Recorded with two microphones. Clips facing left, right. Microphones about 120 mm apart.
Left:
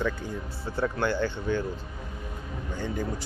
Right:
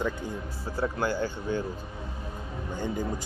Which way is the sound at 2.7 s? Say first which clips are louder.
Right 1 dB; 15° right (ahead or behind).